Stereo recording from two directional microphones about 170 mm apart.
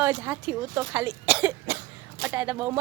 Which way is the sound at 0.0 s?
10° right (ahead or behind).